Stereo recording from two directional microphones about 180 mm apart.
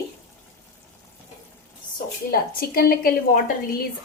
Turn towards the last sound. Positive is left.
turn(degrees=55)  # may be behind; listen again after turning